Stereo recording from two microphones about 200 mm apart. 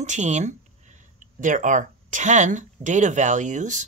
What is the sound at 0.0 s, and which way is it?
Speech, 35° right (ahead or behind).